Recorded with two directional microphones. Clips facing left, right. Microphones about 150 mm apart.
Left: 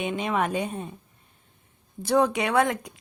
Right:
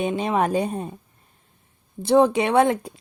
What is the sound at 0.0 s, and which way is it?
Speech, 35° right (ahead or behind).